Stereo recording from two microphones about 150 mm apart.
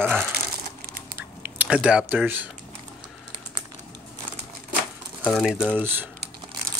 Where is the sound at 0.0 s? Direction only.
10° right (ahead or behind).